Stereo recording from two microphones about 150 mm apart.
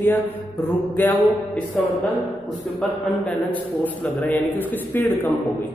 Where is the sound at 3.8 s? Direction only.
10° left (ahead or behind).